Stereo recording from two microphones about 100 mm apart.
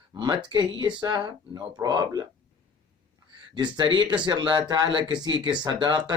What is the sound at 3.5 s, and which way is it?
Speech, 50° right (ahead or behind).